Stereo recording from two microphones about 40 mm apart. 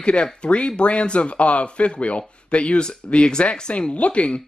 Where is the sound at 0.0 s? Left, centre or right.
Left.